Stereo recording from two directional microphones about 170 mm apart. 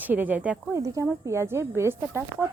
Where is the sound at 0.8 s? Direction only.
20° right (ahead or behind).